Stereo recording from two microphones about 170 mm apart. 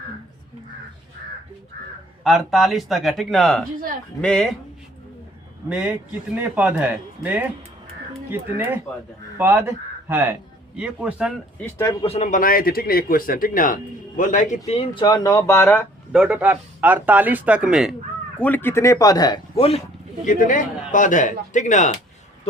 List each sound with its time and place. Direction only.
2.2 s speech: centre (ahead or behind)
5.6 s speech: 5° right (ahead or behind)
12.0 s a man's voice: 40° left (ahead or behind)
14.7 s speech: 35° left (ahead or behind)
15.0 s speech: 25° left (ahead or behind)
16.1 s speech: 5° right (ahead or behind)
18.3 s speech: 10° left (ahead or behind); by 19.8 s 35° left (ahead or behind)
20.2 s a man's voice: 50° left (ahead or behind)